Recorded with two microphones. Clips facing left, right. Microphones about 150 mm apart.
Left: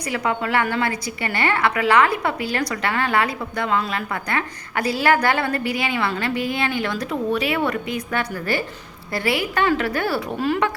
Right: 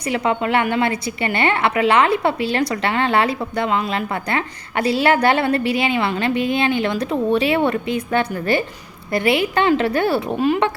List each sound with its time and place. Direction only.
0.0 s a woman's voice: 25° right (ahead or behind)